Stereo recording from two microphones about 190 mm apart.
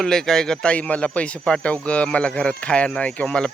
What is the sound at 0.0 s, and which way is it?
Speech, centre (ahead or behind).